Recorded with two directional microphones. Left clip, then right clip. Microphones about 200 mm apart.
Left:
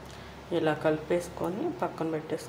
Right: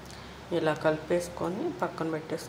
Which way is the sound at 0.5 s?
5° right (ahead or behind).